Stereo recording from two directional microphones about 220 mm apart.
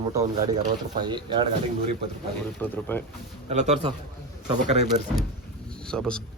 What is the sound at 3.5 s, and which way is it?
Speech, 30° right (ahead or behind).